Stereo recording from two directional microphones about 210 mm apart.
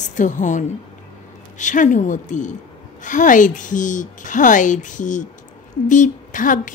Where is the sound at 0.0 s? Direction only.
35° left (ahead or behind).